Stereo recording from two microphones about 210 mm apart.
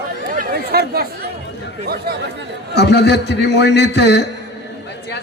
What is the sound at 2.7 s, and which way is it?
A man's voice, 50° left (ahead or behind).